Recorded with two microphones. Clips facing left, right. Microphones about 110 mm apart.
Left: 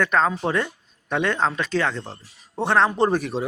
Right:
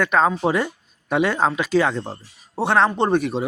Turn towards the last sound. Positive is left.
turn(degrees=0)  # may be behind; listen again after turning